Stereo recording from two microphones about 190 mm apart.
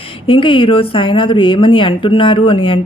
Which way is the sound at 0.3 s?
25° left (ahead or behind).